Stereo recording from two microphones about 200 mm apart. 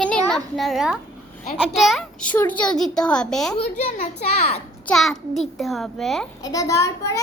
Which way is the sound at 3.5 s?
35° left (ahead or behind).